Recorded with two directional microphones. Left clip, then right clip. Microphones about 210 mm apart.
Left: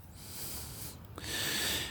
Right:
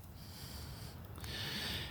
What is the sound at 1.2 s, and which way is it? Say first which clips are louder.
Ratchet: left 7 dB; 45° left (ahead or behind).